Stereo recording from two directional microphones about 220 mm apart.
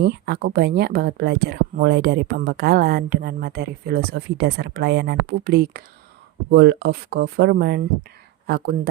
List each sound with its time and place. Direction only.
0.0 s speech: 50° right (ahead or behind)